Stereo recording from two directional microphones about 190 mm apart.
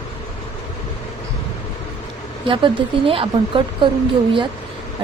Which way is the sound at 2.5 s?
25° right (ahead or behind).